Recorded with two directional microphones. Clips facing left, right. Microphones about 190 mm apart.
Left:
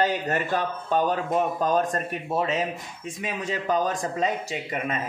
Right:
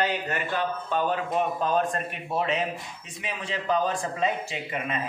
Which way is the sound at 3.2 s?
45° left (ahead or behind).